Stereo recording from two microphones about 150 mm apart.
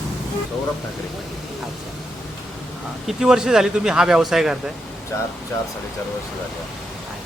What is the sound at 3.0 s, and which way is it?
Speech, 5° right (ahead or behind).